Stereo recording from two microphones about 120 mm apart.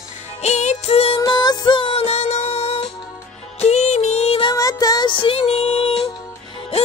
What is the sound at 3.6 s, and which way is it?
Music, 70° left (ahead or behind).